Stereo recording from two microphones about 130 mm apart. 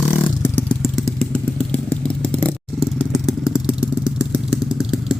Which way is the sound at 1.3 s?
10° left (ahead or behind).